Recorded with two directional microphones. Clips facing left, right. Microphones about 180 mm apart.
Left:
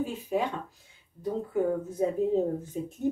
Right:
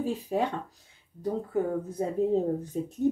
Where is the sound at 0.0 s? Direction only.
35° right (ahead or behind).